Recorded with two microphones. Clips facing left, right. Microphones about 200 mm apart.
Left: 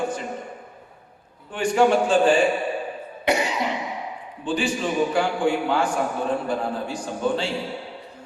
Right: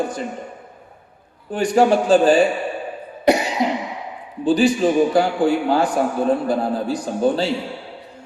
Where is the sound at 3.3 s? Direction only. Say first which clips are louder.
Right 6 dB; 35° right (ahead or behind).